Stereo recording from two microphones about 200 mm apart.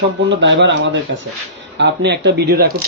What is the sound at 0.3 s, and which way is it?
Speech, 60° right (ahead or behind).